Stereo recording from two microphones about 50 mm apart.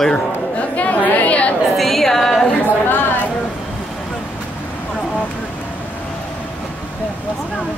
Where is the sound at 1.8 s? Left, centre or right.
Centre.